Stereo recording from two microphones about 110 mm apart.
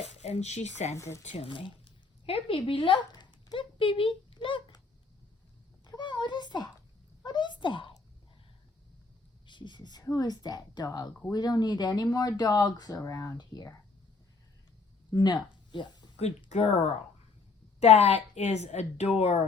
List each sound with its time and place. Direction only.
0.0 s speech: 85° left
0.9 s speech: 25° left (ahead or behind)
1.2 s speech: 90° left
1.5 s speech: 50° left (ahead or behind)
5.8 s a sound: 45° left (ahead or behind)
7.3 s speech: 45° left (ahead or behind)
9.5 s speech: 45° left (ahead or behind)
15.1 s speech: 40° left (ahead or behind)
15.7 s a sound: 45° left (ahead or behind)
16.5 s speech: 90° left
17.7 s a woman's voice: 75° left (ahead or behind)